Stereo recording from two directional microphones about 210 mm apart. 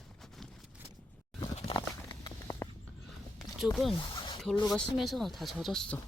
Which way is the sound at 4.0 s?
20° left (ahead or behind).